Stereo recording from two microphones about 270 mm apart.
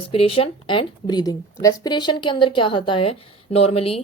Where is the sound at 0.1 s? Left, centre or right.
Left.